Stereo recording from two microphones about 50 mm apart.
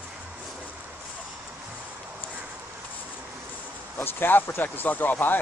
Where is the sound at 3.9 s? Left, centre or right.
Left.